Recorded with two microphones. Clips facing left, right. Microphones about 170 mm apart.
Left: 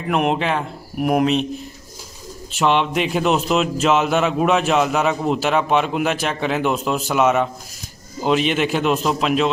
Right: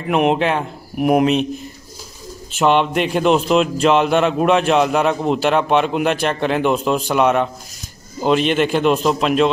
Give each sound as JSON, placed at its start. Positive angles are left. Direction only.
{"t": 0.1, "sound": "speech", "side_deg": 0}
{"t": 2.5, "sound": "speech", "side_deg": 0}